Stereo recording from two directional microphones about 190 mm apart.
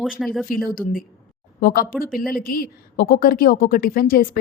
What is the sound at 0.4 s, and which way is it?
A woman's voice, 50° left (ahead or behind).